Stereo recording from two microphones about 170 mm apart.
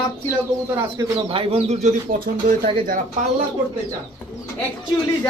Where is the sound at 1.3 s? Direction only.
35° right (ahead or behind).